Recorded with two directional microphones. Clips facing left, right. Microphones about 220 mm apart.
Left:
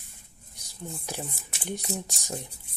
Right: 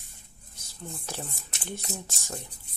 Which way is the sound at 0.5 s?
15° left (ahead or behind).